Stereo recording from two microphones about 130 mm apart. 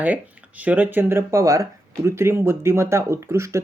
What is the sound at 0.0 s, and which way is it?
Speech, 10° right (ahead or behind).